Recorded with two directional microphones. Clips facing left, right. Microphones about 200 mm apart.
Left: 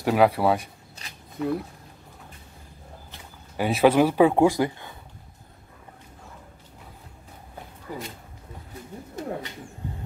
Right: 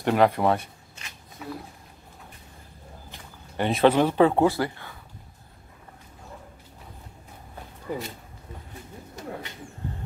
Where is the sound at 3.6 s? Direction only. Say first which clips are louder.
Left 1 dB; 5° left (ahead or behind).